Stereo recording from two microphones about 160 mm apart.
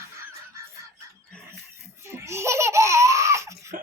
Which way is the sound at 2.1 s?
15° right (ahead or behind).